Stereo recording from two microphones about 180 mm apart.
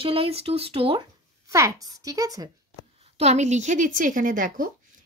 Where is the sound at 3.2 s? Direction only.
40° right (ahead or behind).